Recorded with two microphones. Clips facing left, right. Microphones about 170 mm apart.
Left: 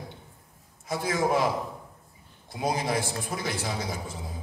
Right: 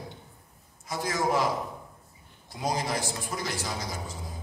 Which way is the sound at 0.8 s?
55° left (ahead or behind).